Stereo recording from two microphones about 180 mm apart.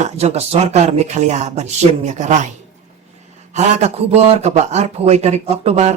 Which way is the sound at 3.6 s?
40° right (ahead or behind).